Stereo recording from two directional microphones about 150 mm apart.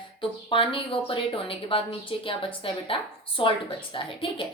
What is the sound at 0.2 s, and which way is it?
Speech, 35° left (ahead or behind).